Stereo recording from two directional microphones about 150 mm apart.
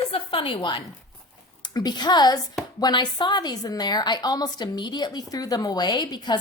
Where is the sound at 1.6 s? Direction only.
30° left (ahead or behind).